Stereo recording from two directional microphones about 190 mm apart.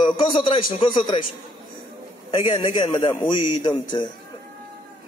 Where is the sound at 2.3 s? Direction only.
25° left (ahead or behind).